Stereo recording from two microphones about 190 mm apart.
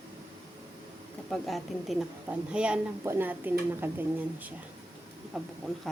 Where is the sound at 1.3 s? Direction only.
Centre (ahead or behind).